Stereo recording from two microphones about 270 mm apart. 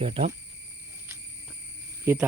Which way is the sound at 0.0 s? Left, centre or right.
Right.